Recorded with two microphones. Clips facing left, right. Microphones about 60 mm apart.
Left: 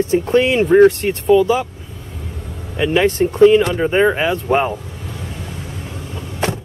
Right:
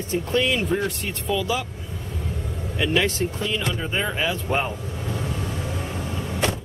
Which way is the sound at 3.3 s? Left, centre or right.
Left.